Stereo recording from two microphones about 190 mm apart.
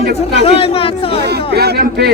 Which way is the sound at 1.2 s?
60° right (ahead or behind).